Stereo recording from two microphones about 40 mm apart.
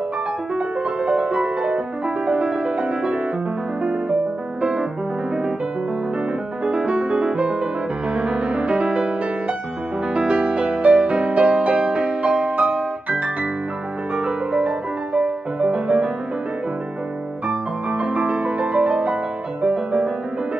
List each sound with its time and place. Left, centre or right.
0.6 s music: right
4.6 s music: right
6.6 s music: right
10.1 s music: right
14.1 s music: right
17.5 s music: right